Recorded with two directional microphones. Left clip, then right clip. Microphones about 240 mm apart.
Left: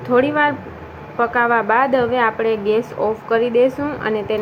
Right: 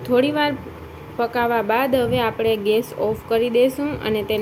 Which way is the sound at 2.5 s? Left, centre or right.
Centre.